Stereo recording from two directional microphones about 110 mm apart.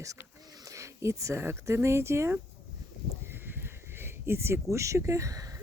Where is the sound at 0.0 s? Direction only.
30° right (ahead or behind).